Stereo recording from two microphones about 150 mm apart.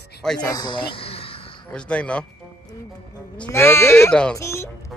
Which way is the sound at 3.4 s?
15° left (ahead or behind).